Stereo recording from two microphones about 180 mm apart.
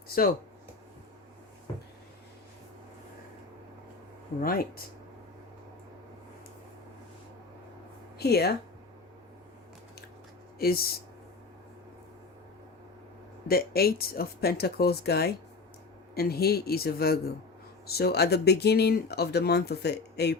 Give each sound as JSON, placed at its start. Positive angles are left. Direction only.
{"t": 0.1, "sound": "speech", "side_deg": 55}
{"t": 4.4, "sound": "speech", "side_deg": 50}
{"t": 8.2, "sound": "speech", "side_deg": 65}
{"t": 10.6, "sound": "speech", "side_deg": 60}
{"t": 13.5, "sound": "speech", "side_deg": 60}